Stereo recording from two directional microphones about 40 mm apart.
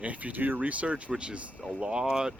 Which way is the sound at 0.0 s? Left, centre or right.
Right.